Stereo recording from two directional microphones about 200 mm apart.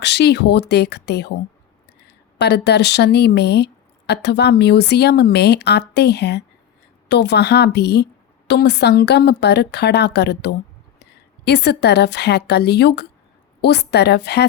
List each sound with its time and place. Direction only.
0.0 s a woman's voice: 55° left (ahead or behind)